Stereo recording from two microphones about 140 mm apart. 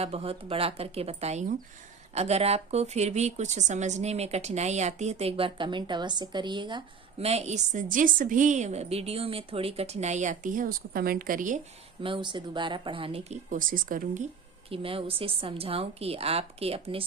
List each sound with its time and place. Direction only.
0.0 s a woman's voice: 45° right (ahead or behind)
7.3 s a woman's voice: 50° right (ahead or behind); by 11.6 s 70° right (ahead or behind)
12.0 s a woman's voice: 35° right (ahead or behind); by 14.3 s 65° right (ahead or behind)
14.7 s a woman's voice: 40° right (ahead or behind)